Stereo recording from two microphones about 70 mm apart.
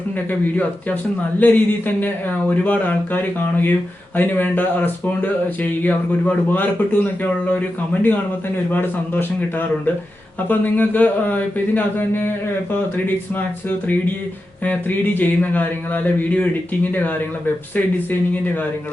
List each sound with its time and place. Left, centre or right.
0.3 s speech: left
8.7 s speech: left
13.7 s speech: left